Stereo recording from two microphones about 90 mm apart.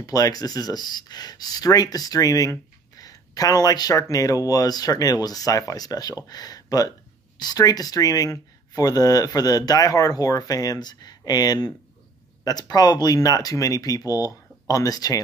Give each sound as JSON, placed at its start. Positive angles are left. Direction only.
{"t": 0.0, "sound": "speech", "side_deg": 45}